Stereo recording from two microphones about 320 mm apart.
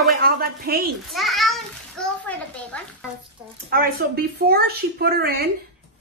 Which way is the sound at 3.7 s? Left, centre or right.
Right.